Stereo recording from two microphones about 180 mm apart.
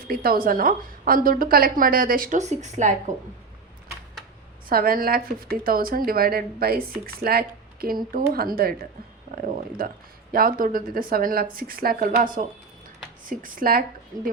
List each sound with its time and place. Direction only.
0.1 s a woman's voice: 55° right (ahead or behind)
4.7 s a woman's voice: 55° right (ahead or behind)